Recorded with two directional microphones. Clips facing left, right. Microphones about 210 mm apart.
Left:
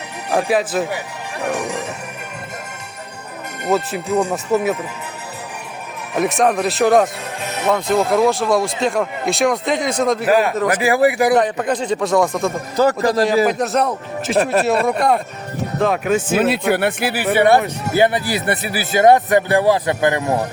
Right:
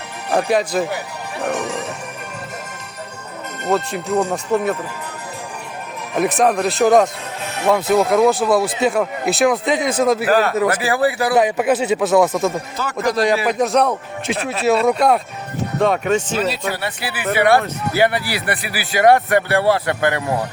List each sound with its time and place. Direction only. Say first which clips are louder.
0.3 s speech: even; 5° left (ahead or behind)
3.6 s speech: left 1 dB; 5° left (ahead or behind)
6.1 s speech: even; centre (ahead or behind)
7.4 s music: even; 20° left (ahead or behind)
7.7 s speech: right 2 dB; 5° right (ahead or behind)
10.2 s speech: even; 10° left (ahead or behind)
11.3 s speech: right 2 dB; 10° right (ahead or behind)
12.7 s a man's voice: left 5 dB; 35° left (ahead or behind)
13.5 s speech: right 2 dB; centre (ahead or behind)
16.4 s speech: left 5 dB; 55° left (ahead or behind)
17.3 s speech: left 1 dB; 25° left (ahead or behind)